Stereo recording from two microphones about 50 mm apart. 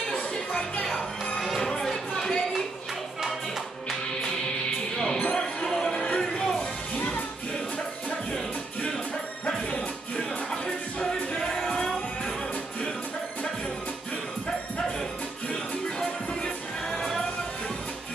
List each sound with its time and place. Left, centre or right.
0.1 s music: centre
0.8 s music: centre
4.9 s music: centre
7.0 s music: left
9.7 s music: centre
16.9 s music: centre